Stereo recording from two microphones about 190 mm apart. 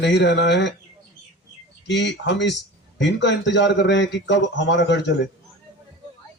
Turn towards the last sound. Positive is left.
turn(degrees=70)  # may be behind; listen again after turning